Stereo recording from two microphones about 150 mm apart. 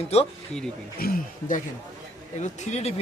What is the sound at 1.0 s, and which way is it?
Speech, 80° left.